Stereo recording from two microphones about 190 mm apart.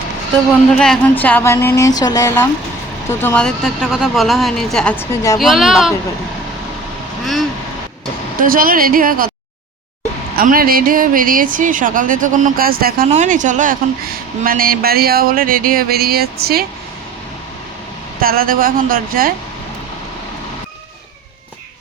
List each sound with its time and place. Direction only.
0.7 s speech: 5° left (ahead or behind)
8.4 s speech: 50° right (ahead or behind)
10.3 s speech: 50° right (ahead or behind)
13.1 s speech: 40° right (ahead or behind)
18.2 s speech: 50° right (ahead or behind)